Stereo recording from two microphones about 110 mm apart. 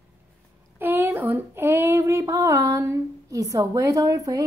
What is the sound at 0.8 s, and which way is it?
Child singing, 20° right (ahead or behind).